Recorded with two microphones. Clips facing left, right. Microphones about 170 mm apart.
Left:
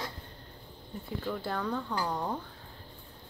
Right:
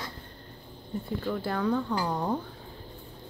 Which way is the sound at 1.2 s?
Centre (ahead or behind).